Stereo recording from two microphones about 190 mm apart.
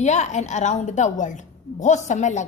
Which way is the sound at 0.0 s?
40° left (ahead or behind).